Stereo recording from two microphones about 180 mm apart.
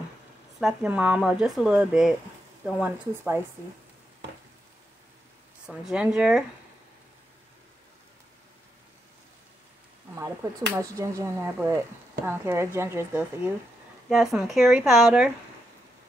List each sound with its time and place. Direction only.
0.6 s speech: 5° right (ahead or behind)
5.7 s speech: 5° right (ahead or behind)
10.1 s speech: 15° right (ahead or behind)
14.0 s speech: centre (ahead or behind)